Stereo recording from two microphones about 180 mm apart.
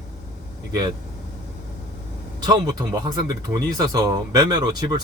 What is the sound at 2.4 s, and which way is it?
Speech, 20° right (ahead or behind).